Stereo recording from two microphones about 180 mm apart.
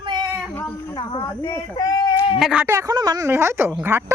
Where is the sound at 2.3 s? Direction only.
Centre (ahead or behind).